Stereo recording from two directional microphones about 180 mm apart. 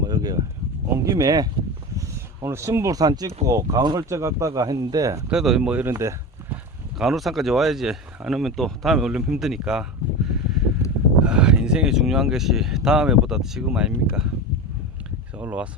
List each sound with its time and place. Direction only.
0.0 s a sound: 20° right (ahead or behind)
1.0 s speech: 15° right (ahead or behind)
5.3 s speech: 5° right (ahead or behind)
7.0 s speech: centre (ahead or behind)
10.2 s a sound: centre (ahead or behind)
11.2 s speech: 5° right (ahead or behind)
15.4 s speech: 10° right (ahead or behind)